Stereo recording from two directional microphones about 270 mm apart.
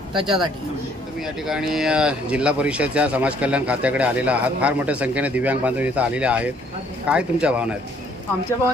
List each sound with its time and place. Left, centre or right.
0.1 s speech: centre
1.2 s speech: centre